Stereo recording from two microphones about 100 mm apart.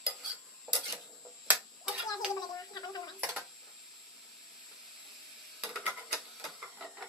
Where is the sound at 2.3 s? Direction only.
45° left (ahead or behind).